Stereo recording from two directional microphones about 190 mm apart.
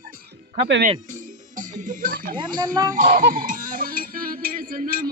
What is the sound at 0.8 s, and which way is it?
Music, 40° right (ahead or behind).